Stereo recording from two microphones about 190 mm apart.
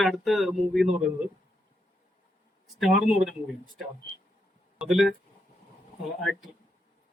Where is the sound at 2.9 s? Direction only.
40° right (ahead or behind).